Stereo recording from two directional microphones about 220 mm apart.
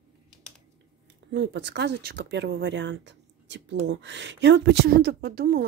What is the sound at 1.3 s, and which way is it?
A woman's voice, 55° right (ahead or behind).